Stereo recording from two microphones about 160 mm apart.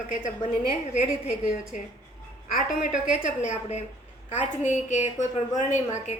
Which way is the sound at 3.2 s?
45° left (ahead or behind).